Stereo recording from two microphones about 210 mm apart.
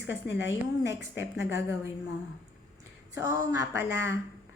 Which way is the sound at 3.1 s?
15° right (ahead or behind).